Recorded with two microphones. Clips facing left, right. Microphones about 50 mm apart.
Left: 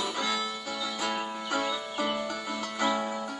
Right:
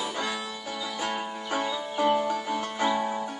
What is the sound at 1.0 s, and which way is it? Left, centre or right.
Music, centre.